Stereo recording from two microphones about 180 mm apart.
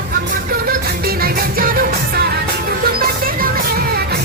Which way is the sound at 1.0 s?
55° right (ahead or behind).